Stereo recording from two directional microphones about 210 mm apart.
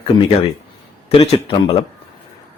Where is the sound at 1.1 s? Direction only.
25° left (ahead or behind).